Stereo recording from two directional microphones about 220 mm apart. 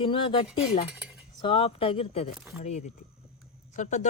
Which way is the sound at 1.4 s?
25° left (ahead or behind).